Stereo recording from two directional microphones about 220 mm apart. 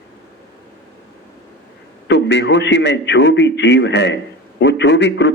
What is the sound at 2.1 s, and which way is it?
A man's voice, 55° left (ahead or behind).